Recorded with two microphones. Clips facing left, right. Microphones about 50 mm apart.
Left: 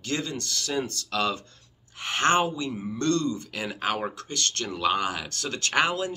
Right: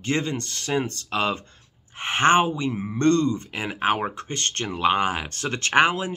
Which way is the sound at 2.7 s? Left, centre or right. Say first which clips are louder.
Right 5 dB; right.